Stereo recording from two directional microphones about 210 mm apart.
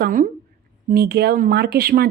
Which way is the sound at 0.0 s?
40° right (ahead or behind).